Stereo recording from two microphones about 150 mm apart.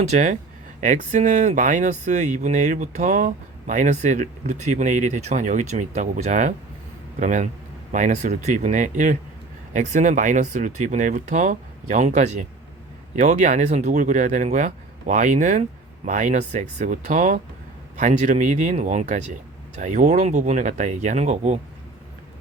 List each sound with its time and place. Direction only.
0.1 s speech: 55° right (ahead or behind)